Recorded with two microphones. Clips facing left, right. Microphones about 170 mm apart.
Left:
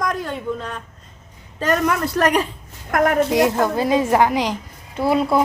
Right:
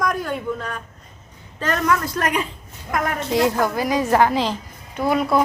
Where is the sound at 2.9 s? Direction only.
50° left (ahead or behind).